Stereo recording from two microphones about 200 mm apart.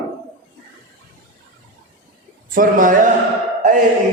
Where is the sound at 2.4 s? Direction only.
45° right (ahead or behind).